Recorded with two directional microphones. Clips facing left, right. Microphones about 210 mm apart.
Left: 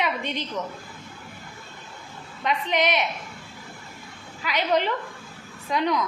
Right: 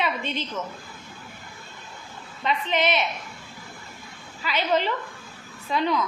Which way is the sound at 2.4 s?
15° left (ahead or behind).